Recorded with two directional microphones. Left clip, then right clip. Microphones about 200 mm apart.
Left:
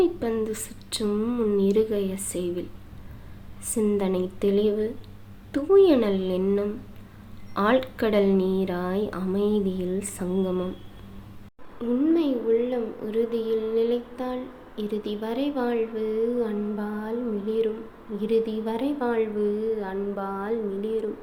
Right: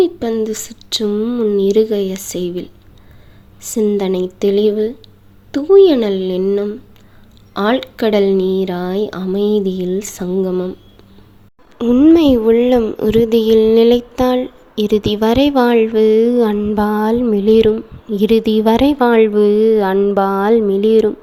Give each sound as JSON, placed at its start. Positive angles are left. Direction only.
{"t": 0.0, "sound": "a woman's voice", "side_deg": -35}
{"t": 3.7, "sound": "a woman's voice", "side_deg": -35}
{"t": 11.8, "sound": "a woman's voice", "side_deg": -55}